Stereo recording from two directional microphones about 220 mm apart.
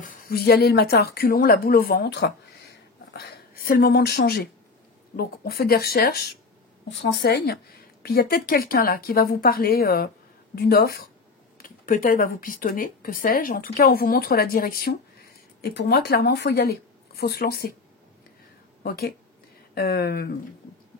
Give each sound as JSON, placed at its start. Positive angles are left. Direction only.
{"t": 0.0, "sound": "a woman's voice", "side_deg": 40}
{"t": 18.8, "sound": "a woman's voice", "side_deg": 45}